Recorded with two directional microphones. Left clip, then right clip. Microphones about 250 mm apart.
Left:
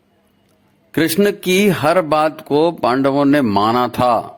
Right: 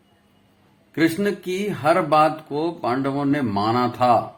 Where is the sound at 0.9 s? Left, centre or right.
Left.